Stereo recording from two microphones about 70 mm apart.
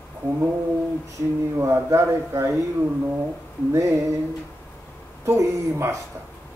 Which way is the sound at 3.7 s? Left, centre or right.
Right.